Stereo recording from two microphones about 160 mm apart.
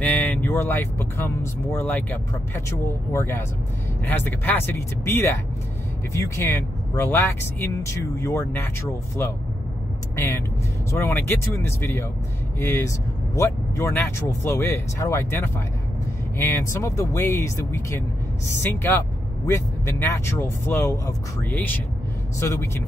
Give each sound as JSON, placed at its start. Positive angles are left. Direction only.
{"t": 0.0, "sound": "speech", "side_deg": 10}
{"t": 10.1, "sound": "speech", "side_deg": 15}